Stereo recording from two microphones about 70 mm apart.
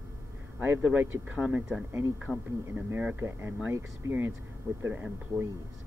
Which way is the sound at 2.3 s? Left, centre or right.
Centre.